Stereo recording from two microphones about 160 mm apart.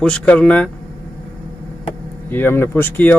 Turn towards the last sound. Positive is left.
turn(degrees=10)  # may be behind; listen again after turning